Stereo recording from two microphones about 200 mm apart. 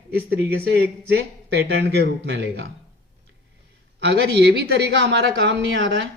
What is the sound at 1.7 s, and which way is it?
Speech, 60° right (ahead or behind).